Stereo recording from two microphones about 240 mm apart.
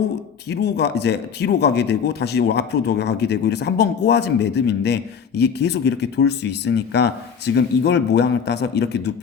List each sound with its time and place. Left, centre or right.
0.4 s speech: left